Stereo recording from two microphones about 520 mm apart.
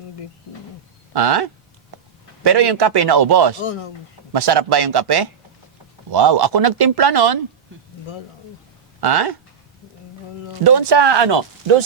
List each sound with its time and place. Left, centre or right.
1.1 s speech: right
9.0 s speech: right
10.6 s speech: right